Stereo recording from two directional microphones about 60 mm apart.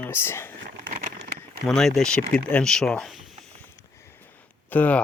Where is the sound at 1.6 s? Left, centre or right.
Centre.